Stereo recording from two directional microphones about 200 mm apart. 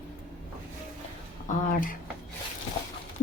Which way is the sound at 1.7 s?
45° left (ahead or behind).